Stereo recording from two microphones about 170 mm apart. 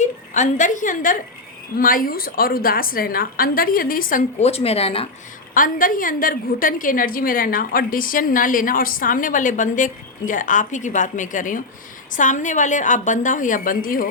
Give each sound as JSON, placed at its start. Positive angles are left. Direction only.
{"t": 0.0, "sound": "a woman's voice", "side_deg": 45}
{"t": 4.4, "sound": "a woman's voice", "side_deg": 35}
{"t": 5.5, "sound": "a woman's voice", "side_deg": 55}